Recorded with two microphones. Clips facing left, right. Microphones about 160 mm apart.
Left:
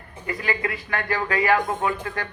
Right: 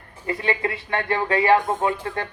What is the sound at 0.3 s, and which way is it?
Speech, 30° right (ahead or behind).